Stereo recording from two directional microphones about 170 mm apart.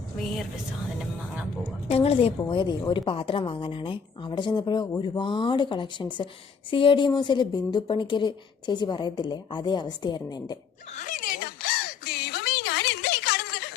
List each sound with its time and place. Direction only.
0.2 s a woman's voice: centre (ahead or behind)
1.9 s a woman's voice: 35° left (ahead or behind)
10.9 s a sound: 50° left (ahead or behind); by 13.7 s 70° left (ahead or behind)